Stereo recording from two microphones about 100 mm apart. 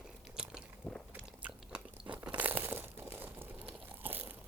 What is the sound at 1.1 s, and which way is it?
Crunch, 15° right (ahead or behind).